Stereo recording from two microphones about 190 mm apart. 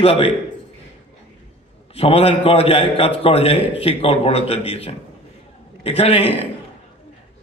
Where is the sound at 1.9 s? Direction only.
30° left (ahead or behind).